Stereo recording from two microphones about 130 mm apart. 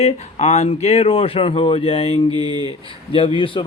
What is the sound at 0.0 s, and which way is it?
Speech, 55° left (ahead or behind).